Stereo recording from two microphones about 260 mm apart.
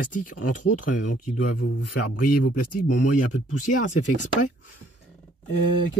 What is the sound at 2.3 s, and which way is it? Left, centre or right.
Speech, left.